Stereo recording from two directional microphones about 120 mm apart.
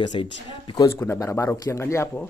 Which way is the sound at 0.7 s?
30° left (ahead or behind).